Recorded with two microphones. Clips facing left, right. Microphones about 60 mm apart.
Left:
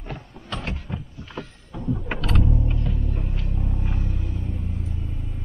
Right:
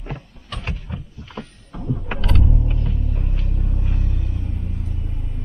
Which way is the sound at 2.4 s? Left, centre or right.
Centre.